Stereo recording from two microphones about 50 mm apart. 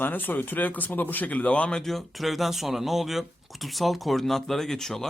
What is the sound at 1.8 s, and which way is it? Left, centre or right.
Speech, centre.